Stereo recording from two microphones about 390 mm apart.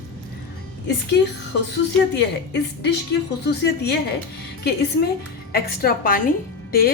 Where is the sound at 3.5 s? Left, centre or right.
Left.